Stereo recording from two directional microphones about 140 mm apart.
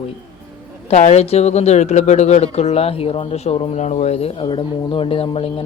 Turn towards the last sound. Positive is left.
turn(degrees=40)  # may be behind; listen again after turning